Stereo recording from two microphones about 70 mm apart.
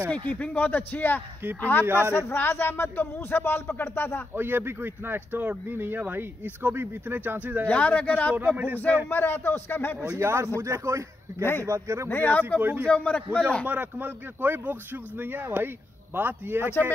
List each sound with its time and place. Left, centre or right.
0.1 s a man's voice: centre
1.9 s speech: right
2.1 s speech: left
4.3 s speech: right
7.6 s a man's voice: centre
9.1 s speech: left
10.0 s a man's voice: right
12.1 s a man's voice: left
12.5 s speech: right
12.8 s a man's voice: centre
13.7 s speech: right